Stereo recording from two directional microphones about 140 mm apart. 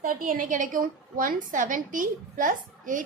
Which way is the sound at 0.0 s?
75° right (ahead or behind).